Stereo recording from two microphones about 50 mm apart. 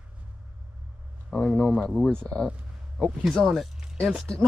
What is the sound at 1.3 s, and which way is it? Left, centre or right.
Speech, centre.